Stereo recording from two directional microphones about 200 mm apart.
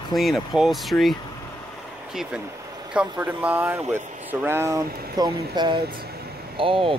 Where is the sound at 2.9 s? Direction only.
5° right (ahead or behind); by 7.0 s 25° right (ahead or behind).